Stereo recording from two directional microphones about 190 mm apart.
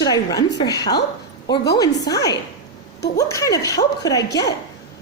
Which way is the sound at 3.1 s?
15° left (ahead or behind).